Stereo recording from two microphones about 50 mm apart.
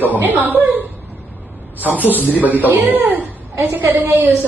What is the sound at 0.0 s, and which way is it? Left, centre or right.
A woman's voice, right.